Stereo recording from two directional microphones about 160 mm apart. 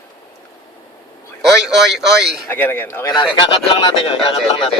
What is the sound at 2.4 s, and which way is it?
Speech, 15° left (ahead or behind).